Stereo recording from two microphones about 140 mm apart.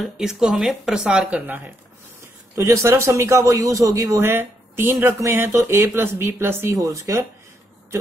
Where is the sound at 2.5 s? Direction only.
20° right (ahead or behind).